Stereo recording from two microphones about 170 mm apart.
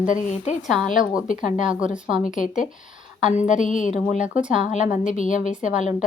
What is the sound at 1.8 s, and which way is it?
Speech, 5° right (ahead or behind).